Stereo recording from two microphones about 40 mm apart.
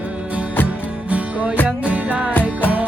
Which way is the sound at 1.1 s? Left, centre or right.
Right.